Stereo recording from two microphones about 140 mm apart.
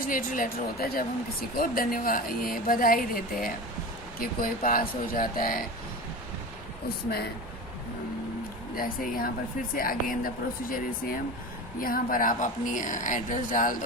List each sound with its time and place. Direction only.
0.0 s a woman's voice: 80° left
8.7 s a woman's voice: 90° left; by 13.7 s 70° left (ahead or behind)